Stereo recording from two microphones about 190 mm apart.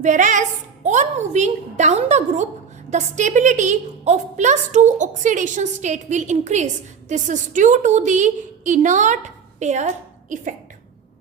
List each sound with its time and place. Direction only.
0.0 s a woman's voice: 40° right (ahead or behind)